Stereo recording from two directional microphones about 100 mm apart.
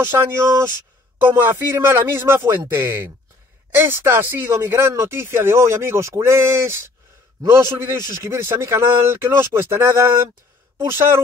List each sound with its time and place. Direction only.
0.0 s speech: 25° right (ahead or behind)